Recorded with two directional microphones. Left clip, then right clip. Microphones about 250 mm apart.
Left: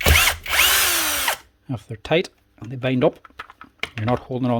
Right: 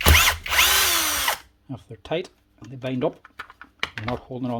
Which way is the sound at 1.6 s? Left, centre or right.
Left.